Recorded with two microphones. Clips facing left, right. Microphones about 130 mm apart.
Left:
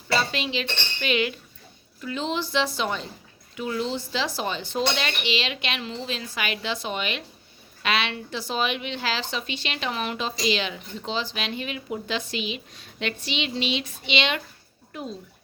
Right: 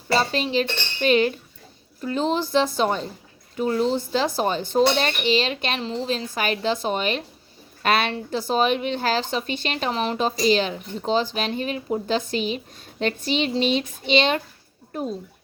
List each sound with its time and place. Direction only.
0.1 s a woman's voice: 40° right (ahead or behind)